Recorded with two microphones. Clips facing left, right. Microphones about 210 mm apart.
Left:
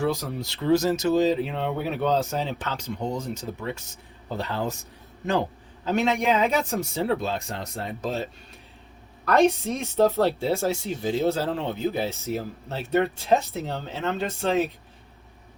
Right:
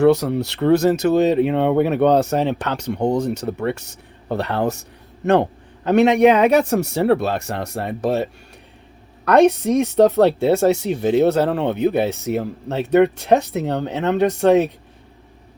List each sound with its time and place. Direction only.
0.0 s speech: 70° right (ahead or behind)
9.6 s speech: 70° right (ahead or behind)